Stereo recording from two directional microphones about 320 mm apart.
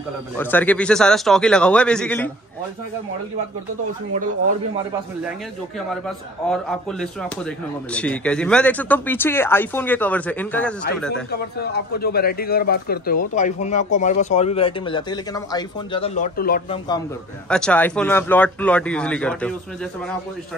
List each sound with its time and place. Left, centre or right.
0.4 s speech: centre
5.9 s speech: centre
11.3 s speech: left
17.5 s speech: centre